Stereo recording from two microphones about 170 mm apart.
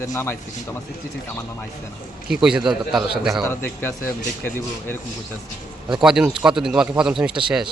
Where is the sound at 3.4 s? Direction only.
15° left (ahead or behind).